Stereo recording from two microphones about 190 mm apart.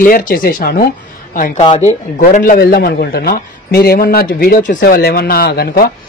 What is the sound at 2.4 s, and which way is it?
A man's voice, 50° left (ahead or behind).